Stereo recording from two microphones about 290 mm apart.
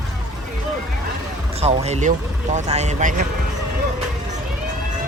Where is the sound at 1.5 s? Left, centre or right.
Right.